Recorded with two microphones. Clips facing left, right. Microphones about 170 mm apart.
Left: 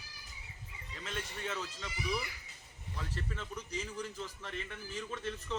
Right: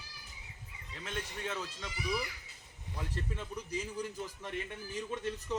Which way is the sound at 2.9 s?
15° right (ahead or behind).